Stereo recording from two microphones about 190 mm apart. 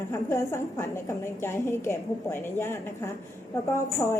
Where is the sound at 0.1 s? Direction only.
15° left (ahead or behind).